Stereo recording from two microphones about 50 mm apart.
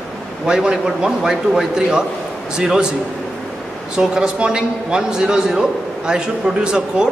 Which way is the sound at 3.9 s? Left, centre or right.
Centre.